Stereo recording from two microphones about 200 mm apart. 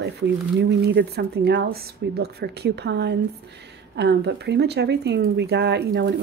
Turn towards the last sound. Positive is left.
turn(degrees=-50)  # may be behind; listen again after turning